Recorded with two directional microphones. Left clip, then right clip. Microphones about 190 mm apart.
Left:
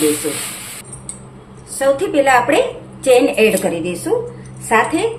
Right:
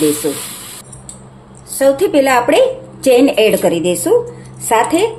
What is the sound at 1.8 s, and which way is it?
A woman's voice, 40° right (ahead or behind).